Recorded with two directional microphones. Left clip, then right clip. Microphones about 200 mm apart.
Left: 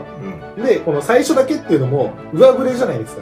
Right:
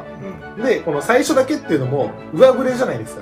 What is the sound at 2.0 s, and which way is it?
Speech, 50° right (ahead or behind).